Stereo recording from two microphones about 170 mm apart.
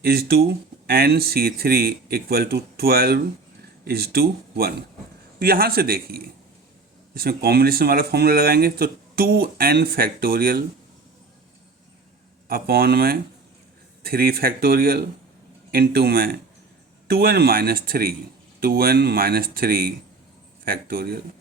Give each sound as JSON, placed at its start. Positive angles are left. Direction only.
{"t": 0.0, "sound": "speech", "side_deg": -65}
{"t": 12.5, "sound": "speech", "side_deg": -60}